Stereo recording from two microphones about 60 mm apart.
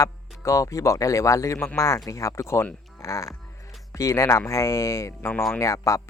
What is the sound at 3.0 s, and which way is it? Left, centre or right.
Speech, left.